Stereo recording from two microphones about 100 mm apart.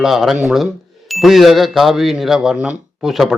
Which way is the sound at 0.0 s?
Centre (ahead or behind).